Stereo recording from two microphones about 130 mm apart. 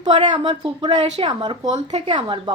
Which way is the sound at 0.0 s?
35° right (ahead or behind).